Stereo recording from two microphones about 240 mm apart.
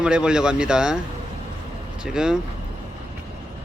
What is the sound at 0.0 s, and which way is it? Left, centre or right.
Speech, centre.